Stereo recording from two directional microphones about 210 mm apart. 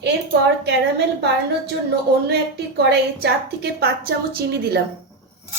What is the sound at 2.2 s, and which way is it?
A woman's voice, 50° right (ahead or behind).